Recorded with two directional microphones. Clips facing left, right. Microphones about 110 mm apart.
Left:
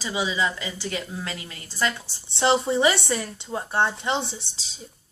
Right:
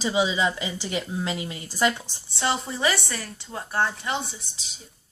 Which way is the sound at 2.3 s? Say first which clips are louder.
Left 6 dB; 25° left (ahead or behind).